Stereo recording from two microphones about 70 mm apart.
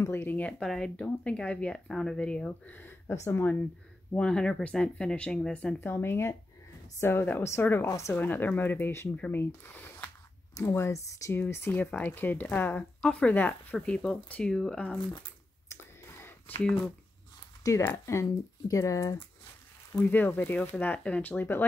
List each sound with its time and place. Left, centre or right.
0.0 s speech: left
0.4 s speech: centre
2.7 s speech: left
4.2 s speech: centre
5.8 s speech: left
10.9 s speech: left
11.3 s speech: left
13.8 s speech: centre
15.7 s clicking: left
16.4 s speech: left
17.8 s speech: left
20.0 s speech: left